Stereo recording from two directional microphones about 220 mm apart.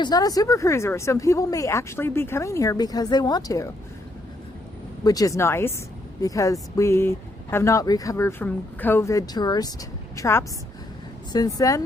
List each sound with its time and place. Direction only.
0.0 s speech: 15° left (ahead or behind)
5.0 s speech: 15° left (ahead or behind)